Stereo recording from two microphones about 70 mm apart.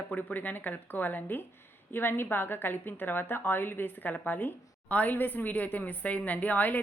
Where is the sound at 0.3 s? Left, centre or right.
Left.